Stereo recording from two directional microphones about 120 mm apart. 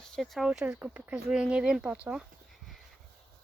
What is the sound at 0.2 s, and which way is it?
Speech, centre (ahead or behind).